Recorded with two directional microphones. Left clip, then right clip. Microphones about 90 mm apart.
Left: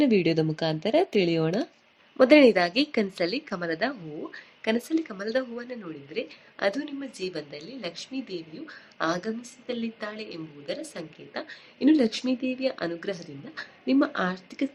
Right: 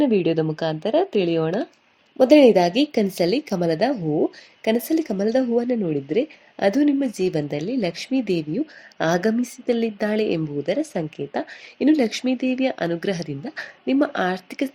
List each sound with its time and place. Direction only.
0.0 s speech: 25° right (ahead or behind)
2.1 s a woman's voice: 45° right (ahead or behind)